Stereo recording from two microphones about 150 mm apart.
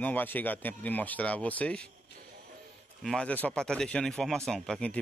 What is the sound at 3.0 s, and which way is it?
Speech, 5° left (ahead or behind).